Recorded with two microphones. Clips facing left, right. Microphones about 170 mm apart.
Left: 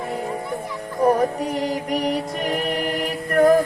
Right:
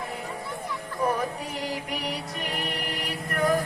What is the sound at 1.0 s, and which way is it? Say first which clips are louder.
Music: left 9 dB; 45° left (ahead or behind).